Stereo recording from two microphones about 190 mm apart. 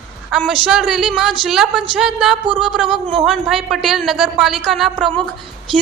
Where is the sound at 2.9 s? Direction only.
30° right (ahead or behind).